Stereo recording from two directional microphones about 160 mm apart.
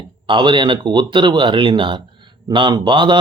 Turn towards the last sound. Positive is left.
turn(degrees=-30)  # may be behind; listen again after turning